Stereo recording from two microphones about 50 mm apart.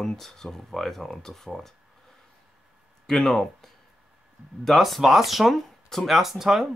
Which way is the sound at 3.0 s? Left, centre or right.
Centre.